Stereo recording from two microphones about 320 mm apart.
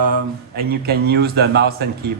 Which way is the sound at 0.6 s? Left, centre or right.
Right.